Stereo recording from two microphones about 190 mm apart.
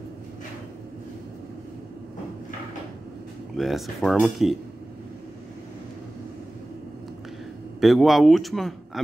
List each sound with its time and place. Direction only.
3.5 s speech: centre (ahead or behind)
7.8 s speech: centre (ahead or behind)